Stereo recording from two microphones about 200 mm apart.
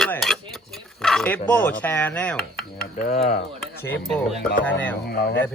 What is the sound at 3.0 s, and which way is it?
Speech, 35° left (ahead or behind).